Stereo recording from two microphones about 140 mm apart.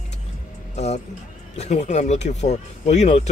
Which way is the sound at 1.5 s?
50° left (ahead or behind).